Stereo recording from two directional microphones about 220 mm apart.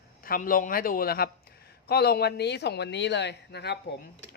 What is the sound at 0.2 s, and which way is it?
Speech, 40° left (ahead or behind).